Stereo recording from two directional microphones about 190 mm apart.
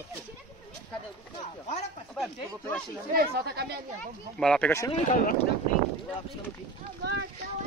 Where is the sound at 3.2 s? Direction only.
60° right (ahead or behind).